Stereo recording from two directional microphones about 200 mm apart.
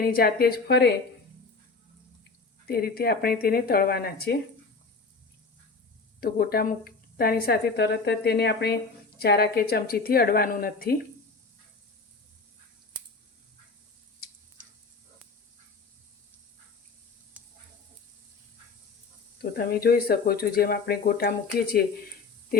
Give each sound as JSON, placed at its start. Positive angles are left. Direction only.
{"t": 0.0, "sound": "a woman's voice", "side_deg": 50}
{"t": 2.6, "sound": "a woman's voice", "side_deg": 50}
{"t": 6.1, "sound": "a woman's voice", "side_deg": 50}
{"t": 19.4, "sound": "a woman's voice", "side_deg": 50}